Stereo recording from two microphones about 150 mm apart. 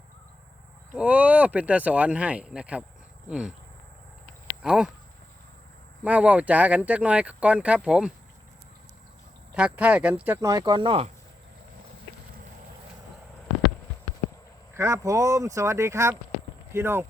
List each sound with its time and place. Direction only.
0.9 s speech: 10° right (ahead or behind)
4.6 s speech: 5° right (ahead or behind)
6.0 s speech: 10° right (ahead or behind)
9.6 s speech: 10° right (ahead or behind)
10.4 s speech: 25° right (ahead or behind)
14.7 s speech: 15° right (ahead or behind)